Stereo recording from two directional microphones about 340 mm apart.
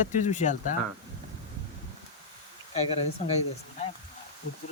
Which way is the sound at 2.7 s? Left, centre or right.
Centre.